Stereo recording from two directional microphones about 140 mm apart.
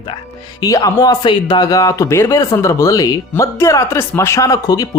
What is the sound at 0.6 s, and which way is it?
Speech, 25° left (ahead or behind).